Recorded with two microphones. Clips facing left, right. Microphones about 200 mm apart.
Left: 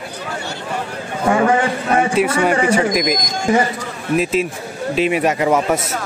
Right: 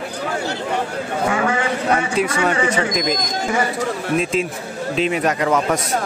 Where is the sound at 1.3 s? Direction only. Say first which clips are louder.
Left 8 dB; 30° left (ahead or behind).